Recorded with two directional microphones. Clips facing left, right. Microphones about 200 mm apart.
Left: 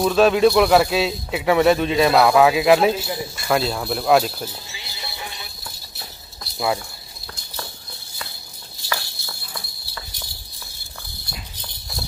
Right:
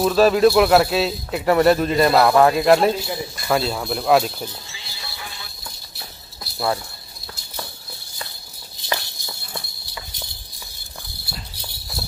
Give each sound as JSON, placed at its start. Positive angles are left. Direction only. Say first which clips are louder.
{"t": 0.0, "sound": "a man's voice", "louder": "right 1 dB", "side_deg": 0}
{"t": 4.6, "sound": "clip-clop", "louder": "left 2 dB", "side_deg": 20}
{"t": 6.4, "sound": "rattle", "louder": "even", "side_deg": 5}
{"t": 8.8, "sound": "a sound", "louder": "right 2 dB", "side_deg": -20}
{"t": 11.5, "sound": "cricket", "louder": "right 1 dB", "side_deg": -10}